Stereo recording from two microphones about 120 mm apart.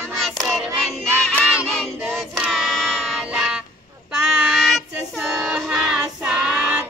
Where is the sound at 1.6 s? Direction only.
Centre (ahead or behind).